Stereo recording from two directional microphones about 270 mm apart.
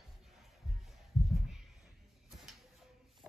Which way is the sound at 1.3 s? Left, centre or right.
Centre.